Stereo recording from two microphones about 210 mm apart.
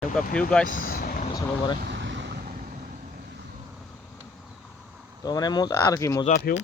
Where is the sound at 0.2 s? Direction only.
5° left (ahead or behind).